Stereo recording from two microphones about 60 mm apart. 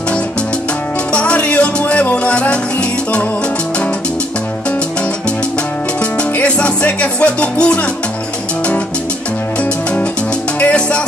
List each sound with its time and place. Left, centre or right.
1.1 s music: centre
6.3 s music: left
10.6 s music: left